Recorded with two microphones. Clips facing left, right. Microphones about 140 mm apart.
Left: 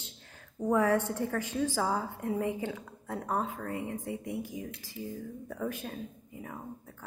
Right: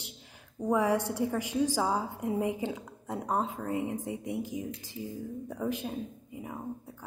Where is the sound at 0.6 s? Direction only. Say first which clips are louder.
Even; 15° right (ahead or behind).